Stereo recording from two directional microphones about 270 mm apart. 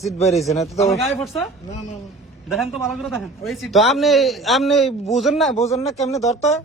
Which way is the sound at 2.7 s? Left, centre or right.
Centre.